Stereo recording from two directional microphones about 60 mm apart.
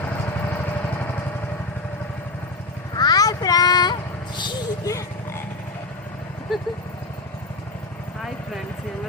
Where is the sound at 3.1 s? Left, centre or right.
Left.